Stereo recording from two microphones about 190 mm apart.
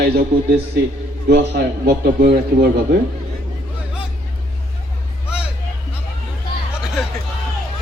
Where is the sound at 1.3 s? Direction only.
65° right (ahead or behind).